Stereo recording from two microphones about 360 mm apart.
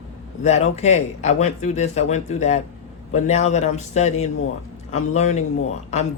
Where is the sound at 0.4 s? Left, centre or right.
Centre.